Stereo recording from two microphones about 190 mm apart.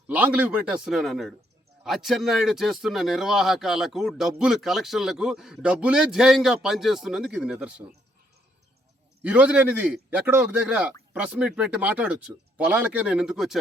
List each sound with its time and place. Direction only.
0.1 s speech: 10° right (ahead or behind)
9.2 s a man's voice: 5° right (ahead or behind)